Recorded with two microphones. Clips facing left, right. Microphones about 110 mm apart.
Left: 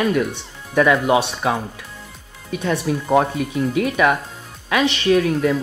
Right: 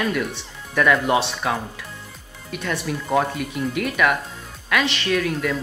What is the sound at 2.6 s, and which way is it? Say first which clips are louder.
Speech: left 5 dB; 25° left (ahead or behind).